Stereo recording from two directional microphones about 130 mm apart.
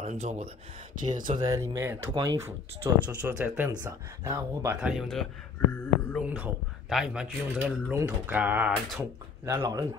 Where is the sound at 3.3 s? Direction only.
10° right (ahead or behind).